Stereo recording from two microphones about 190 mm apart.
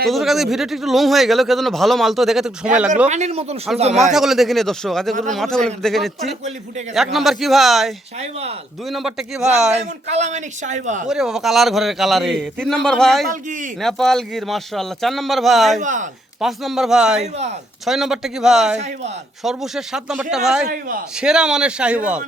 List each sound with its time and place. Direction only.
0.1 s a man's voice: centre (ahead or behind)
3.1 s a man's voice: 35° right (ahead or behind)
4.1 s a man's voice: centre (ahead or behind)
8.2 s a man's voice: 35° right (ahead or behind)
8.9 s a man's voice: centre (ahead or behind)
9.7 s a man's voice: 35° right (ahead or behind)
11.0 s a man's voice: 5° right (ahead or behind)
15.8 s a man's voice: 40° right (ahead or behind)
16.4 s a man's voice: centre (ahead or behind)
17.2 s a man's voice: 35° right (ahead or behind)
17.8 s a man's voice: centre (ahead or behind)